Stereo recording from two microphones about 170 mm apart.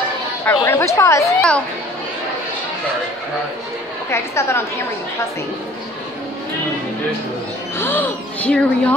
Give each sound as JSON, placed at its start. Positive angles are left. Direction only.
{"t": 0.5, "sound": "speech", "side_deg": 15}
{"t": 1.2, "sound": "speech", "side_deg": 5}
{"t": 4.1, "sound": "speech", "side_deg": 15}
{"t": 7.7, "sound": "speech", "side_deg": 10}